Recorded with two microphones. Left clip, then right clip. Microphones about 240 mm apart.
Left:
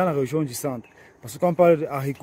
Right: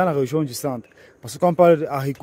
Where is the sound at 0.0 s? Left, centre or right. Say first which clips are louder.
Right 3 dB; centre.